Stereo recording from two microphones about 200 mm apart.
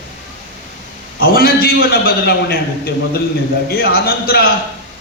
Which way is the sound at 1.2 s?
50° left (ahead or behind).